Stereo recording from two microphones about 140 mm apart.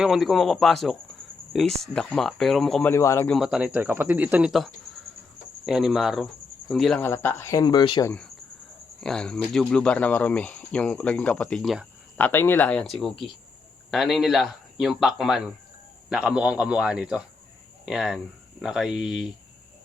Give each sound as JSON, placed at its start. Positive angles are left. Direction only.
{"t": 0.0, "sound": "speech", "side_deg": 0}
{"t": 2.9, "sound": "a man's voice", "side_deg": 20}
{"t": 3.2, "sound": "speech", "side_deg": 0}
{"t": 7.0, "sound": "speech", "side_deg": 15}
{"t": 7.6, "sound": "speech", "side_deg": 30}
{"t": 9.0, "sound": "speech", "side_deg": 5}
{"t": 12.1, "sound": "speech", "side_deg": 15}